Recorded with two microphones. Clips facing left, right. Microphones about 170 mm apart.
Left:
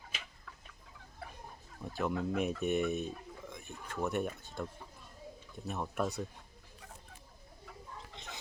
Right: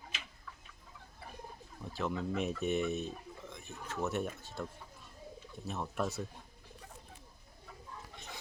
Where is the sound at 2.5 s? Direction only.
55° left (ahead or behind).